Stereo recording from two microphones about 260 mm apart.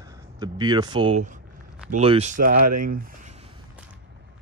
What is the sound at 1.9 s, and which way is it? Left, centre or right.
Speech, right.